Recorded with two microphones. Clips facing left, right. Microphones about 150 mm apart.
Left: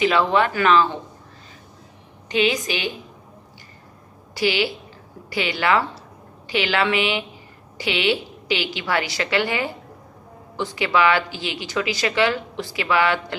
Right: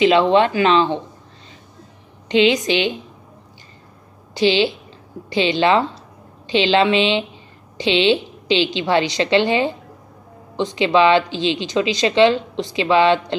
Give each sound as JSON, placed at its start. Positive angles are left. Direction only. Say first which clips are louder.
{"t": 0.0, "sound": "a woman's voice", "louder": "right 5 dB", "side_deg": -25}
{"t": 2.2, "sound": "a woman's voice", "louder": "right 6 dB", "side_deg": -25}
{"t": 4.3, "sound": "a woman's voice", "louder": "right 5 dB", "side_deg": -25}